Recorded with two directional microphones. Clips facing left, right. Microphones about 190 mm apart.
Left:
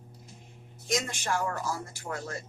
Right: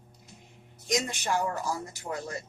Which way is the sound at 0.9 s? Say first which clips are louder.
Right 1 dB; 15° right (ahead or behind).